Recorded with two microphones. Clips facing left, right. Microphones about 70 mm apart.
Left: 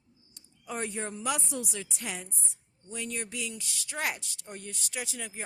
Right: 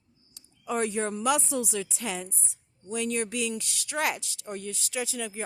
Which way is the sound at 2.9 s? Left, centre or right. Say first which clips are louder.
Right 8 dB; right.